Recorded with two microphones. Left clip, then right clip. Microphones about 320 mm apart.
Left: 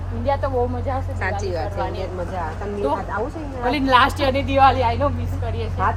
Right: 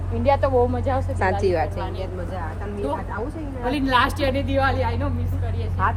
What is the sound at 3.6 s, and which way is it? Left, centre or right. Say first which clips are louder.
A woman's voice: left 4 dB; centre.